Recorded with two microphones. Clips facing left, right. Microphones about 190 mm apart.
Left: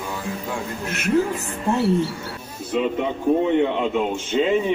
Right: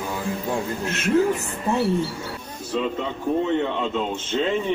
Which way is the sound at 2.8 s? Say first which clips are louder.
Left 5 dB; 15° left (ahead or behind).